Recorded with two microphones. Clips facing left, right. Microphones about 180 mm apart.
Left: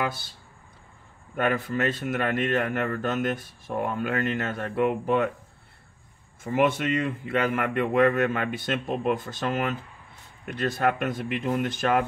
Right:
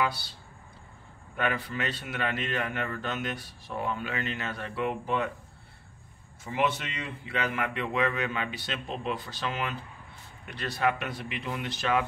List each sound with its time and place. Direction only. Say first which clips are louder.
0.0 s a man's voice: even; 50° left (ahead or behind)
1.3 s a man's voice: left 5 dB; 45° left (ahead or behind)
6.4 s a man's voice: left 6 dB; 50° left (ahead or behind)